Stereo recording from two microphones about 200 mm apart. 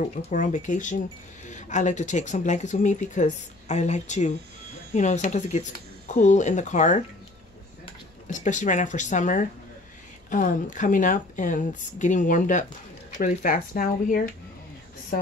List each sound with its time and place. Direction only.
0.0 s speech: 40° left (ahead or behind)
8.3 s speech: 40° left (ahead or behind)